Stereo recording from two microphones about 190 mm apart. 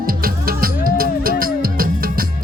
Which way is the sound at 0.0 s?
50° right (ahead or behind).